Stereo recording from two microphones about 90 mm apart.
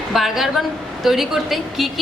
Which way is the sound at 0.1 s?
5° right (ahead or behind).